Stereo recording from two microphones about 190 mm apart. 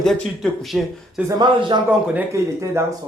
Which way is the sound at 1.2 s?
20° right (ahead or behind).